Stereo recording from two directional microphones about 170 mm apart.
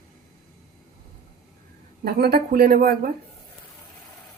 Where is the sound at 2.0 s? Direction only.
65° right (ahead or behind).